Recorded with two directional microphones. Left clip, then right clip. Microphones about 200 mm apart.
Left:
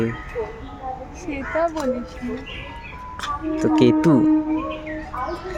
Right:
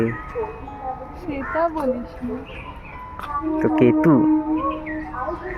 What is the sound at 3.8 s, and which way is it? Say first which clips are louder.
Speech: even; 25° left (ahead or behind).